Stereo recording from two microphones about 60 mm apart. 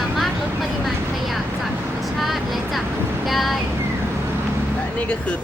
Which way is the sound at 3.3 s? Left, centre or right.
Centre.